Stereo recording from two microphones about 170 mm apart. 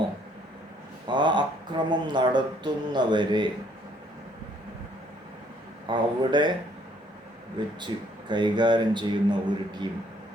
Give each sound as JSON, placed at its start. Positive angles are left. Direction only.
{"t": 1.0, "sound": "speech", "side_deg": -25}
{"t": 5.9, "sound": "speech", "side_deg": -25}
{"t": 7.6, "sound": "speech", "side_deg": -25}